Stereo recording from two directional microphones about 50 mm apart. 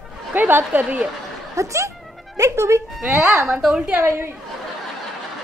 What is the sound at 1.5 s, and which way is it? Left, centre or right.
A woman's voice, right.